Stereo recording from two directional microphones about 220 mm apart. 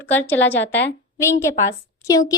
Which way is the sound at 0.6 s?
55° left (ahead or behind).